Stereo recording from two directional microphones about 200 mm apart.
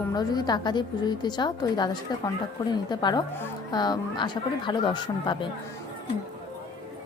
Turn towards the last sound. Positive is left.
turn(degrees=25)  # may be behind; listen again after turning